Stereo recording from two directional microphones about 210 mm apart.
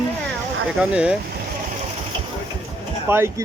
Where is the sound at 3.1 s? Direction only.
10° right (ahead or behind).